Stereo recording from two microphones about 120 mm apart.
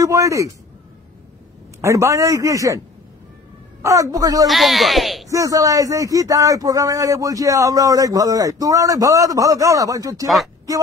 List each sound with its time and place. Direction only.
0.0 s a man's voice: 25° right (ahead or behind)
1.8 s a man's voice: 25° right (ahead or behind)
3.8 s a man's voice: 25° right (ahead or behind)
4.5 s speech: centre (ahead or behind)
5.3 s a man's voice: 30° right (ahead or behind)
10.2 s speech: centre (ahead or behind)